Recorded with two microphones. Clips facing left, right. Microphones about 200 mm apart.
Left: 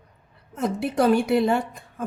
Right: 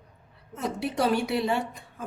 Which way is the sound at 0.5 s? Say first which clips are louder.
Left 5 dB; 50° left (ahead or behind).